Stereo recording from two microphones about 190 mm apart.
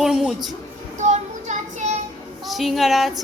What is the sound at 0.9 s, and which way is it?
Child singing, 35° right (ahead or behind).